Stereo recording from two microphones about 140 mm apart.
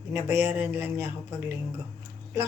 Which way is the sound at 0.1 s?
20° right (ahead or behind).